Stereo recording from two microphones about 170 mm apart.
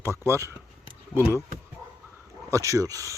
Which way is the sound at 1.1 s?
15° right (ahead or behind).